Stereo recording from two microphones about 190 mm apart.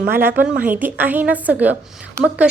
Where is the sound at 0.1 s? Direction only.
10° right (ahead or behind).